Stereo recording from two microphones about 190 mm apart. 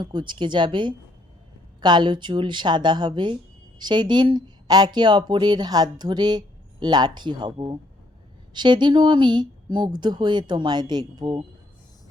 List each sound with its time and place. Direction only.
0.0 s speech: 25° right (ahead or behind)